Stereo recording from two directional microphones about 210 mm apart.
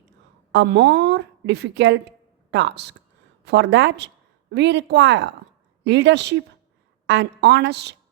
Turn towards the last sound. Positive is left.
turn(degrees=-55)  # may be behind; listen again after turning